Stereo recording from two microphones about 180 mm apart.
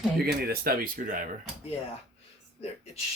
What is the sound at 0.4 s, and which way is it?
Speech, 55° right (ahead or behind).